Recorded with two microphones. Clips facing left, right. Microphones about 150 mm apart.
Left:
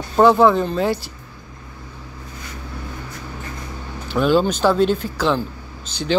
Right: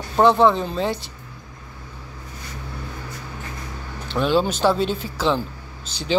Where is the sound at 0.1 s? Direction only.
5° left (ahead or behind).